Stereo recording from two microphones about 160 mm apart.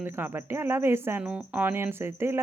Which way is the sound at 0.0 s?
15° right (ahead or behind).